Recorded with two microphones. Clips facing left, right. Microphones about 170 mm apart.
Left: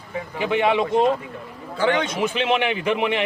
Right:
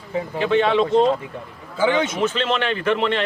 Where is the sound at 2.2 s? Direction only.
10° left (ahead or behind).